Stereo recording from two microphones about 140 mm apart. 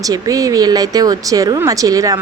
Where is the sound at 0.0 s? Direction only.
25° right (ahead or behind).